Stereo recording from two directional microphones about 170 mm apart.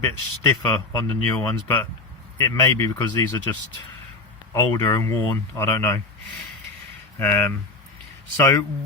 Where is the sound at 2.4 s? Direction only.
20° left (ahead or behind).